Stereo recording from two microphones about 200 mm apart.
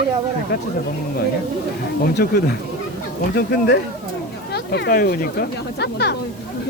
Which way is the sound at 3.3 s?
50° left (ahead or behind).